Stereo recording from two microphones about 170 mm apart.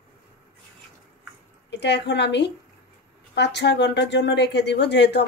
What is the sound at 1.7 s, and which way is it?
A woman's voice, 90° left.